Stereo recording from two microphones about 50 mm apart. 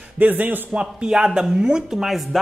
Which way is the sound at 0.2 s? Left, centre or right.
Right.